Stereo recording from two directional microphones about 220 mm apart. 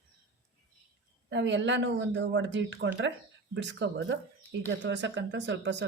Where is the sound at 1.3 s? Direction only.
55° right (ahead or behind).